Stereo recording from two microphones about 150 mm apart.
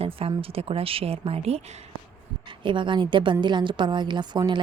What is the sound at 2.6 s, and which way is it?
A woman's voice, 30° right (ahead or behind).